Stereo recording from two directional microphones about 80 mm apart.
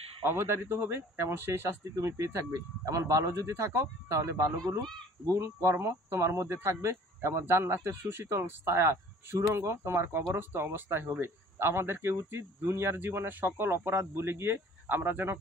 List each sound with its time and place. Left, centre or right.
0.2 s speech: right